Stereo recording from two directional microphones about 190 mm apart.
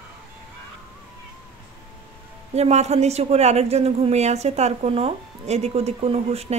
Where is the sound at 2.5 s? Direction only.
35° right (ahead or behind).